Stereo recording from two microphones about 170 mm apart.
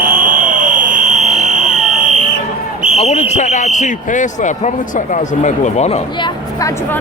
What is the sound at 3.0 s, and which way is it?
Speech, 40° left (ahead or behind).